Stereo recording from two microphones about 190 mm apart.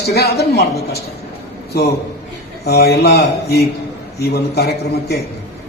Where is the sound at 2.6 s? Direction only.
60° left (ahead or behind).